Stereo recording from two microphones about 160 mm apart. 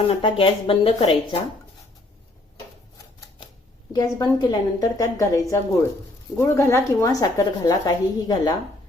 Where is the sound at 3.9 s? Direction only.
25° left (ahead or behind).